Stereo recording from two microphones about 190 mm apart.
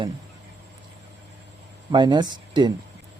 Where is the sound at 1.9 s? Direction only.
25° right (ahead or behind).